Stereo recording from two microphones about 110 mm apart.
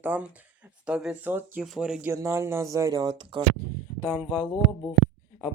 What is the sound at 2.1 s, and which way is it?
Speech, 25° right (ahead or behind).